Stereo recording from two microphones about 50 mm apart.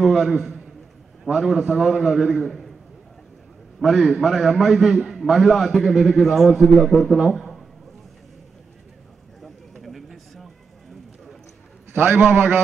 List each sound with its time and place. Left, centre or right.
0.0 s a man's voice: centre
3.8 s a man's voice: centre
9.4 s a sound: centre
11.9 s a man's voice: right